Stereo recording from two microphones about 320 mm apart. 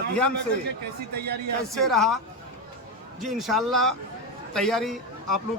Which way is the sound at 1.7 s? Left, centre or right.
Centre.